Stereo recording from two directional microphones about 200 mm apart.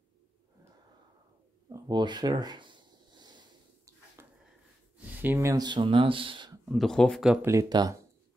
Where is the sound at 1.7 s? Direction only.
20° right (ahead or behind).